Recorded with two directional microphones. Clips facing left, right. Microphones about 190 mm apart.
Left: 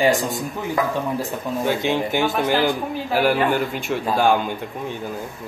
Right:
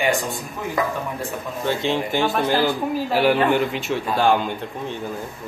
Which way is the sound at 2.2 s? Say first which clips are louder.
Right 1 dB; centre (ahead or behind).